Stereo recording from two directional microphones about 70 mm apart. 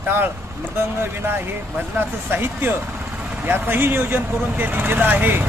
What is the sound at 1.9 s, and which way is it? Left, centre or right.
Speech, right.